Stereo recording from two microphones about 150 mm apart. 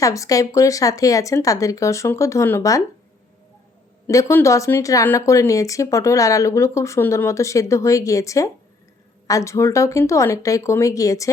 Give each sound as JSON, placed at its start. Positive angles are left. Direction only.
{"t": 0.0, "sound": "speech", "side_deg": 20}
{"t": 4.0, "sound": "speech", "side_deg": 20}